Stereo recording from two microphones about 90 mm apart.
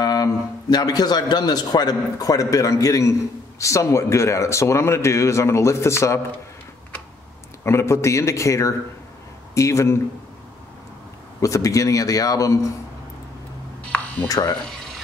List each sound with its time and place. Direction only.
0.0 s a man's voice: 45° left (ahead or behind)
7.6 s a man's voice: 30° left (ahead or behind)
11.4 s a man's voice: 40° left (ahead or behind)
13.8 s a sound: 15° left (ahead or behind)
14.2 s speech: 45° left (ahead or behind)